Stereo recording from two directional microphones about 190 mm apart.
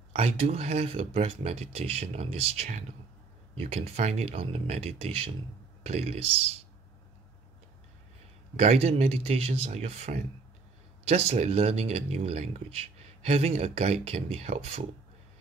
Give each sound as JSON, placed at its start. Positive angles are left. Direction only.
{"t": 0.1, "sound": "speech", "side_deg": -30}
{"t": 8.5, "sound": "speech", "side_deg": -35}